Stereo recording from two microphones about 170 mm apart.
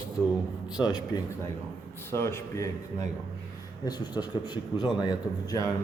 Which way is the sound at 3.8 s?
25° left (ahead or behind).